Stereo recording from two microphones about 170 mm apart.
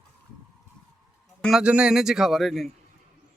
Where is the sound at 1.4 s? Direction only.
Centre (ahead or behind).